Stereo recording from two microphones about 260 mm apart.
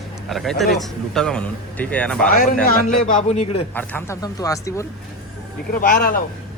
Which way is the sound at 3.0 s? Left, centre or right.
Left.